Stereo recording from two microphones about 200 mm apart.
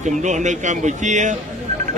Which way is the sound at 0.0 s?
35° right (ahead or behind).